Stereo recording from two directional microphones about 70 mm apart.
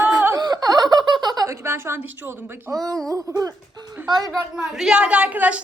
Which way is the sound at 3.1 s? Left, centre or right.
Right.